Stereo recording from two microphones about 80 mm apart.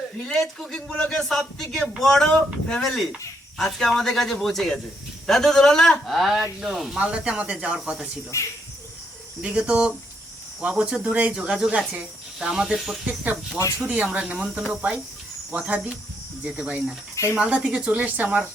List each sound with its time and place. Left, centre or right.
0.2 s speech: centre
7.0 s speech: centre
8.3 s speech: left
9.4 s speech: centre
13.8 s speech: centre